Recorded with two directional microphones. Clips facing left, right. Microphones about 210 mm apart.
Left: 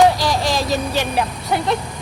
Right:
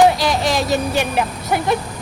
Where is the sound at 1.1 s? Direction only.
5° right (ahead or behind).